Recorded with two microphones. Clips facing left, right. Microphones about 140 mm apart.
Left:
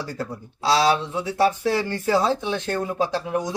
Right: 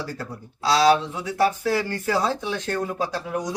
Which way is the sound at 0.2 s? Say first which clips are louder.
Left 3 dB; 25° left (ahead or behind).